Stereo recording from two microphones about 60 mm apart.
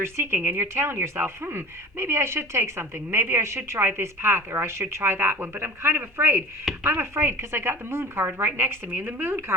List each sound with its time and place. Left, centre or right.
0.0 s speech: right
6.7 s speech: centre
7.0 s a woman's voice: right
8.9 s a woman's voice: right